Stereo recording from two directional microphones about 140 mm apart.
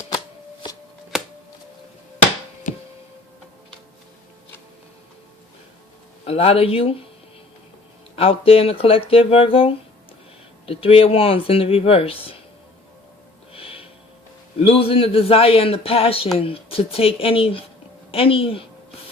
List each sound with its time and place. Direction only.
1.1 s a sound: 5° right (ahead or behind)
2.7 s music: 65° left (ahead or behind)
6.2 s a man's voice: 45° left (ahead or behind)
8.1 s a man's voice: 45° left (ahead or behind)
13.5 s music: 45° left (ahead or behind)
14.6 s a man's voice: 45° left (ahead or behind)